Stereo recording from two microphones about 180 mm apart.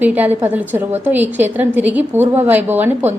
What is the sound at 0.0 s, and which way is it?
A woman's voice, 10° right (ahead or behind).